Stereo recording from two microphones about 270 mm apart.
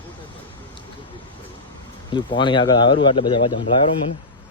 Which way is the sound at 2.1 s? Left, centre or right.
Centre.